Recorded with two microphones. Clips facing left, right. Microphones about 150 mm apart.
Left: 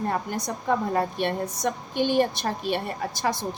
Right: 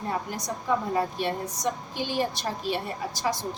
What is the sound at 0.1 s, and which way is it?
A woman's voice, 55° left (ahead or behind).